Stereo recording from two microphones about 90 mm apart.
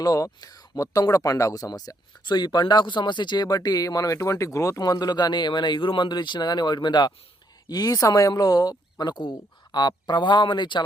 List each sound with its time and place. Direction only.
0.0 s speech: 45° left (ahead or behind)
4.8 s speech: 45° left (ahead or behind)